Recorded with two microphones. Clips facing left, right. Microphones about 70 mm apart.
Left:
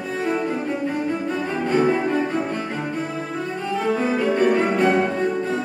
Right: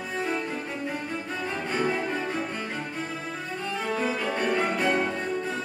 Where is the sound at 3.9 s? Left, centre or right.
Left.